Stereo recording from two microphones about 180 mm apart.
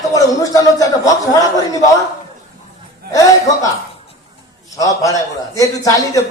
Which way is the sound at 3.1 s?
20° left (ahead or behind).